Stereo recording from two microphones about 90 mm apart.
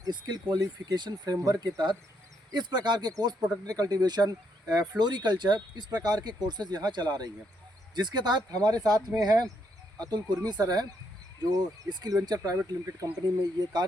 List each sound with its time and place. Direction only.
0.0 s speech: 55° right (ahead or behind)
1.4 s speech: 40° right (ahead or behind)
2.5 s speech: 55° right (ahead or behind)
11.9 s speech: 50° right (ahead or behind)